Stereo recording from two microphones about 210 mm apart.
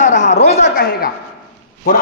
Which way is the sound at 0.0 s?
35° left (ahead or behind).